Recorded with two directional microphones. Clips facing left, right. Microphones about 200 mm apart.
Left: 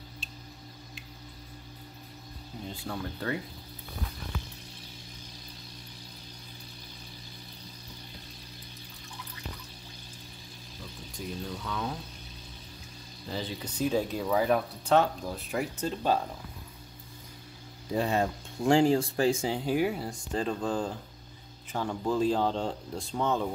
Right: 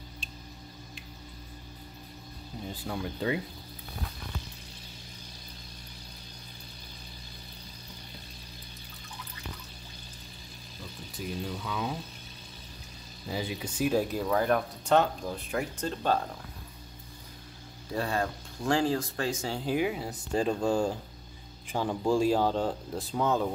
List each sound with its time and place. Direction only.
2.6 s speech: 5° right (ahead or behind)
11.1 s speech: 5° right (ahead or behind)
13.3 s speech: 10° right (ahead or behind)
14.2 s speech: 5° left (ahead or behind)
17.9 s speech: 20° left (ahead or behind)
19.6 s speech: 5° left (ahead or behind)
19.9 s speech: 5° right (ahead or behind)